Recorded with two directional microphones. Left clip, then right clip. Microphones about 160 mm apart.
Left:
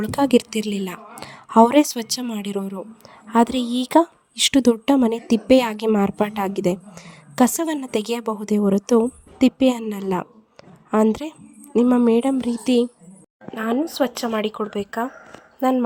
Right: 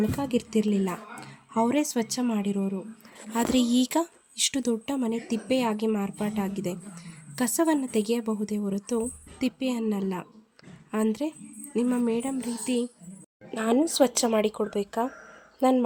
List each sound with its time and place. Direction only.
0.0 s a woman's voice: 65° left (ahead or behind); by 2.2 s 45° left (ahead or behind)
3.3 s a woman's voice: 40° left (ahead or behind)
13.5 s speech: 10° left (ahead or behind)